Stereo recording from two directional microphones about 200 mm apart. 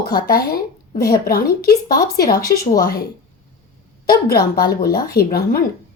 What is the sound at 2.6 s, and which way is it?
Speech, 50° left (ahead or behind).